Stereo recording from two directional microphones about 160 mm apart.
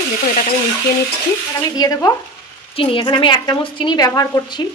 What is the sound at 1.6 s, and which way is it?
Speech, 25° left (ahead or behind).